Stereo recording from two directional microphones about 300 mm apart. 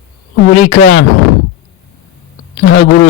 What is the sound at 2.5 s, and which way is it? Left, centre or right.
Speech, left.